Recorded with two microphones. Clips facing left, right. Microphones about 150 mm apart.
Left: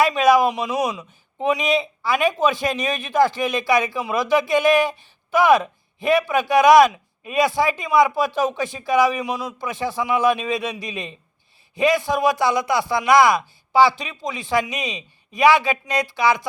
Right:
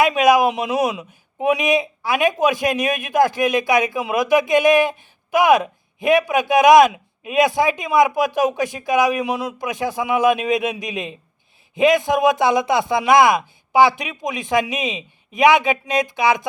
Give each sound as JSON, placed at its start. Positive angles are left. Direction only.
{"t": 0.2, "sound": "a man's voice", "side_deg": -15}